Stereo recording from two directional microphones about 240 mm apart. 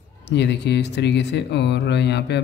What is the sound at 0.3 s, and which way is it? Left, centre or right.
Speech, left.